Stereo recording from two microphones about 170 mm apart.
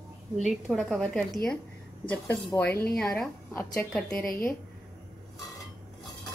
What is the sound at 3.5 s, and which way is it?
Speech, 15° left (ahead or behind).